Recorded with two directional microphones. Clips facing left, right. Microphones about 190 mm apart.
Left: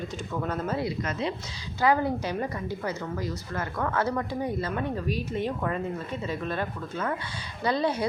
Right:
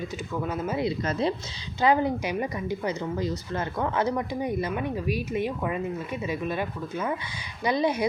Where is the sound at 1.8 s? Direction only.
20° right (ahead or behind).